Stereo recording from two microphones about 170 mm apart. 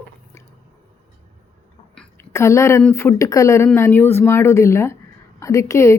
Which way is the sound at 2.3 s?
15° left (ahead or behind).